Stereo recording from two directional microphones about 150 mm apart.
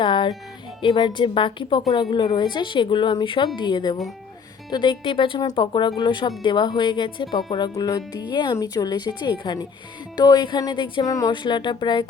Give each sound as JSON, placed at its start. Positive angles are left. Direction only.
{"t": 0.0, "sound": "music", "side_deg": 30}
{"t": 0.8, "sound": "a woman's voice", "side_deg": 35}